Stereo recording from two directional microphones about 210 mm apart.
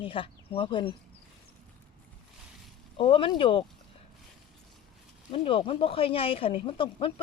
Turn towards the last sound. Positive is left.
turn(degrees=25)  # may be behind; listen again after turning